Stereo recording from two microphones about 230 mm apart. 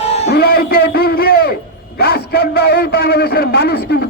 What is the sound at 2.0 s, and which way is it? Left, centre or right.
A man's voice, left.